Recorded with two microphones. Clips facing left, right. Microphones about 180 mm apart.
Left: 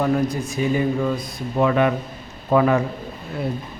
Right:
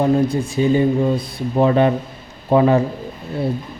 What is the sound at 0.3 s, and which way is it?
Speech, 30° right (ahead or behind).